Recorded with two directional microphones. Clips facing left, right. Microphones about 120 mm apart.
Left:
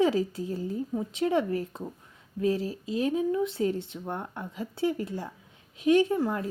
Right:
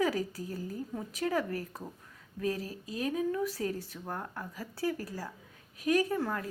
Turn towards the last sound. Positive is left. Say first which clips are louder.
# left 5 dB
turn(degrees=20)  # may be behind; listen again after turning